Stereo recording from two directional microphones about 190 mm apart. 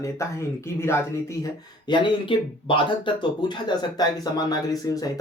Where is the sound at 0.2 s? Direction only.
15° left (ahead or behind).